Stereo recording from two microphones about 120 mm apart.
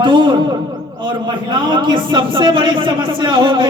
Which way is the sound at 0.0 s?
45° right (ahead or behind).